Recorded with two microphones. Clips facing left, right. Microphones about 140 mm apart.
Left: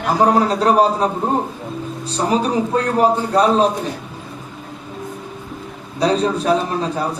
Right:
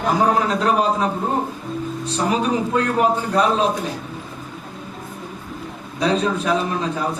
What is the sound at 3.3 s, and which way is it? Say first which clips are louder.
Speech: left 4 dB; 35° left (ahead or behind).